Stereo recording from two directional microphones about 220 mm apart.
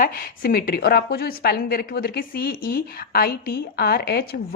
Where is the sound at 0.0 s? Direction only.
40° left (ahead or behind).